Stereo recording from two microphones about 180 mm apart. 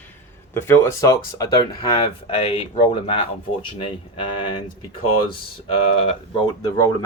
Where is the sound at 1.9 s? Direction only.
35° left (ahead or behind).